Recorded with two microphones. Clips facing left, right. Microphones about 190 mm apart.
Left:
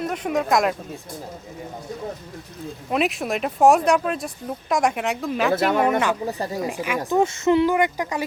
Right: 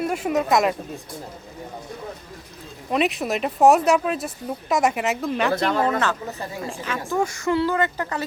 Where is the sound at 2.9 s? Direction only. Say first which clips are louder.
Right 1 dB; centre (ahead or behind).